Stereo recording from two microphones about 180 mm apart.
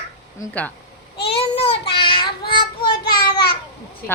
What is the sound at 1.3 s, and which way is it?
Child singing, 30° left (ahead or behind).